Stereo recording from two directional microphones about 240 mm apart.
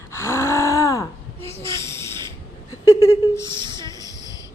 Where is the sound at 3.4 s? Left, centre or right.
Centre.